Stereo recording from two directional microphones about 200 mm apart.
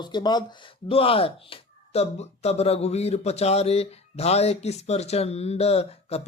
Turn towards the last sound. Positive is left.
turn(degrees=30)  # may be behind; listen again after turning